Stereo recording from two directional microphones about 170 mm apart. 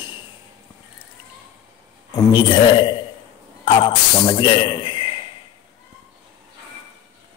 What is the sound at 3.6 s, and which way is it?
A man's voice, 30° left (ahead or behind).